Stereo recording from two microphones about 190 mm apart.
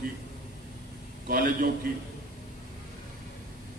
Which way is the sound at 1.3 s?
50° right (ahead or behind).